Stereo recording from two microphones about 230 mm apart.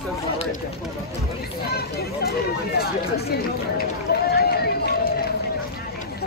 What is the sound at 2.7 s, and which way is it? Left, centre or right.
Speech, left.